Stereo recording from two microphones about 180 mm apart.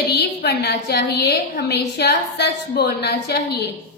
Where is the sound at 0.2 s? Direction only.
65° left (ahead or behind).